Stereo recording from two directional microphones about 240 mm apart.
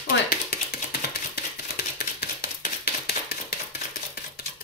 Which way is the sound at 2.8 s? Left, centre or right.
Left.